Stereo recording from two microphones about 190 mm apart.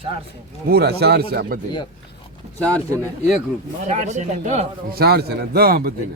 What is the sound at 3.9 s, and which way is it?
Speech, 40° right (ahead or behind).